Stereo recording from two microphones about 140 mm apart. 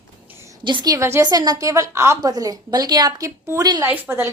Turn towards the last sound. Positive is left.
turn(degrees=-15)  # may be behind; listen again after turning